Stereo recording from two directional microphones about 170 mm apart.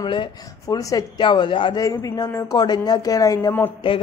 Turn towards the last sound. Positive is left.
turn(degrees=15)  # may be behind; listen again after turning